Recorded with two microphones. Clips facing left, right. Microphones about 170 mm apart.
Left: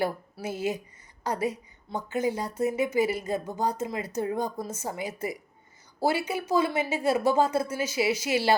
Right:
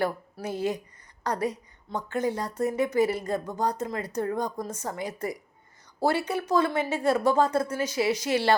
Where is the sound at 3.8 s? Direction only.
20° left (ahead or behind).